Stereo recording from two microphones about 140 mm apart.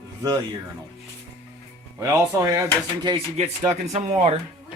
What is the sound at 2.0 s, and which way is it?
Speech, 20° right (ahead or behind).